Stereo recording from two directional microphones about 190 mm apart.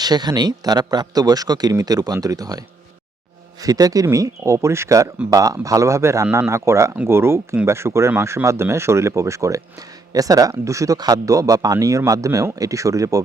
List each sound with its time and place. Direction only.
0.0 s speech: 20° right (ahead or behind)
3.6 s speech: 20° right (ahead or behind)